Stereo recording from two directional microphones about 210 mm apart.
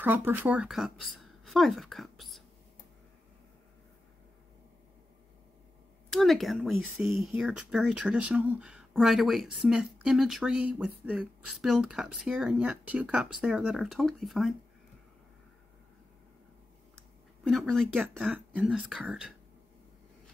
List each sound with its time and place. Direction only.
0.0 s speech: 10° right (ahead or behind)
6.0 s speech: centre (ahead or behind)
17.5 s speech: centre (ahead or behind)